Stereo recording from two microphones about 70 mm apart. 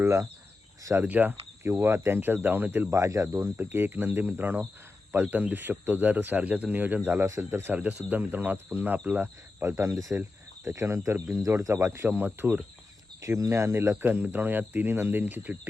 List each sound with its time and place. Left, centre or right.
0.0 s speech: right
1.0 s speech: right
1.6 s speech: right
2.9 s speech: right
3.6 s speech: right
7.3 s speech: right
7.6 s speech: right
9.6 s speech: right
9.9 s speech: right
10.2 s speech: right
12.0 s speech: right
13.9 s speech: right